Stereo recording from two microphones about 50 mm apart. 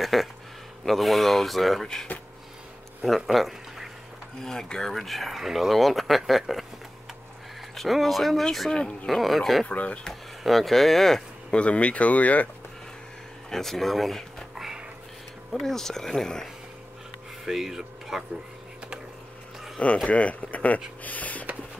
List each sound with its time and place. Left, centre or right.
0.0 s speech: centre
3.0 s speech: centre
4.4 s speech: centre
7.7 s speech: centre
8.6 s speech: centre
9.0 s speech: centre
9.7 s speech: left
10.4 s speech: centre
11.5 s speech: left
13.5 s a sound: centre
15.5 s speech: centre
17.5 s speech: centre
20.1 s speech: left